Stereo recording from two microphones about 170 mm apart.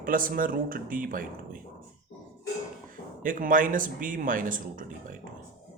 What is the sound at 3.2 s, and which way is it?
A man's voice, 55° right (ahead or behind).